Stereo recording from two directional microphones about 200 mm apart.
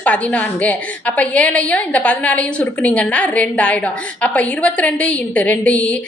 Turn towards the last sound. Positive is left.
turn(degrees=5)  # may be behind; listen again after turning